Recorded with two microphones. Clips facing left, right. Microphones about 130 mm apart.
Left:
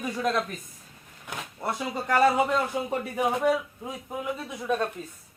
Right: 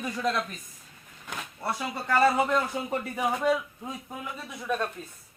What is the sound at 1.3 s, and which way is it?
Speech, 15° left (ahead or behind).